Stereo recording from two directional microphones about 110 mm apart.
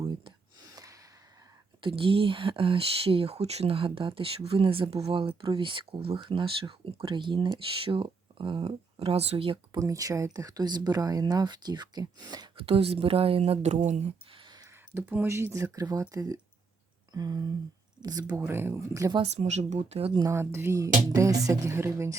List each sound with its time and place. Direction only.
0.3 s a sound: 35° right (ahead or behind)
1.8 s speech: 55° right (ahead or behind)
9.7 s speech: 30° right (ahead or behind)
12.5 s speech: 60° right (ahead or behind); by 14.1 s 90° right
14.3 s a sound: 40° right (ahead or behind)
14.9 s speech: 20° right (ahead or behind); by 18.3 s 35° right (ahead or behind)
18.3 s speech: 20° right (ahead or behind)
19.2 s speech: 80° right
20.3 s speech: 25° right (ahead or behind)